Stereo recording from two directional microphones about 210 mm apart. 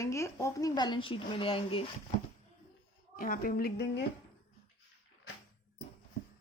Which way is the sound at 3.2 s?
40° left (ahead or behind).